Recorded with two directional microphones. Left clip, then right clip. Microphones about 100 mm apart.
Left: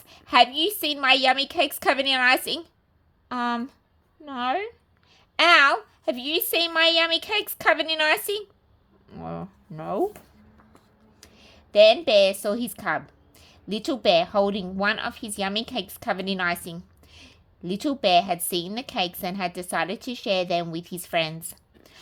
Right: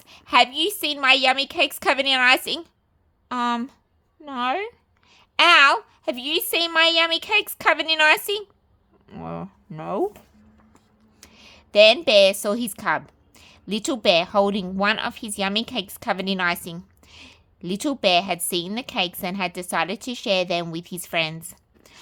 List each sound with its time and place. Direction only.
0.1 s speech: 20° right (ahead or behind)
11.2 s a sound: 40° right (ahead or behind)
12.0 s a woman's voice: 35° right (ahead or behind)
13.1 s a sound: 30° right (ahead or behind)
13.8 s a woman's voice: 40° right (ahead or behind)
14.1 s a woman's voice: 30° right (ahead or behind)
16.6 s a sound: 30° right (ahead or behind)
17.7 s a woman's voice: 40° right (ahead or behind)
18.1 s speech: 25° right (ahead or behind)